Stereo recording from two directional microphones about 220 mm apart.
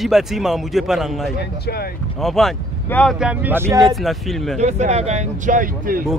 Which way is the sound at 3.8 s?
Centre (ahead or behind).